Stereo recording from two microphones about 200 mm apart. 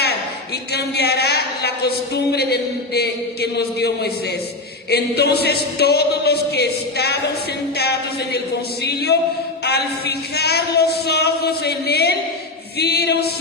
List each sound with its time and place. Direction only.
0.7 s a man's voice: 55° left (ahead or behind)